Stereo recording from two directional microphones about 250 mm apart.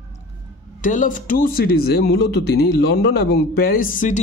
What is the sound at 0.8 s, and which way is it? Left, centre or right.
Speech, left.